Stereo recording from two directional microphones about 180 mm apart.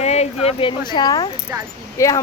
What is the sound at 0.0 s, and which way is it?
Speech, 35° left (ahead or behind).